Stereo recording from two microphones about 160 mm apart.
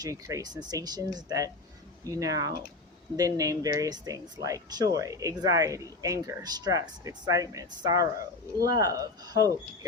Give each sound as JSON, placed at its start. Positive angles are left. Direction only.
{"t": 0.0, "sound": "speech", "side_deg": -20}